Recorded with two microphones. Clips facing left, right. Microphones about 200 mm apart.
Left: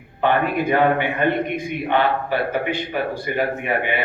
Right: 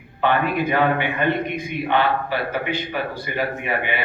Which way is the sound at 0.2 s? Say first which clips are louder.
Left 1 dB; 50° left (ahead or behind).